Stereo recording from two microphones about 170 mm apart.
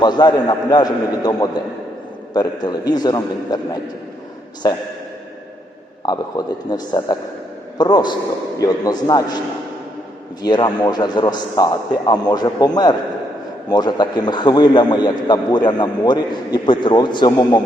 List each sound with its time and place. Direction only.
0.0 s a man's voice: 25° left (ahead or behind)
6.1 s a man's voice: 25° left (ahead or behind)
10.4 s a man's voice: 25° left (ahead or behind)